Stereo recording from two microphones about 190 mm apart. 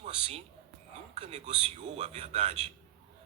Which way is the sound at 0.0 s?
30° right (ahead or behind).